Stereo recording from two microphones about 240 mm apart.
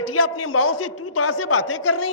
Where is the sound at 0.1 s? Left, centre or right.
Left.